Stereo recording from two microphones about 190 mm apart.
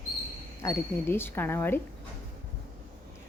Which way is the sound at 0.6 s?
15° left (ahead or behind).